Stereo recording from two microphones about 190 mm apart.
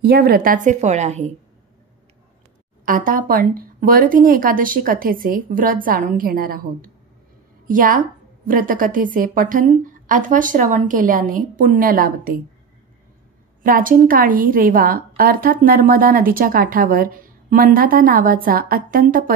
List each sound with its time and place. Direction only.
0.0 s a woman's voice: 55° right (ahead or behind); by 1.3 s 35° right (ahead or behind)
2.8 s a woman's voice: 45° right (ahead or behind)
13.6 s a woman's voice: 45° right (ahead or behind)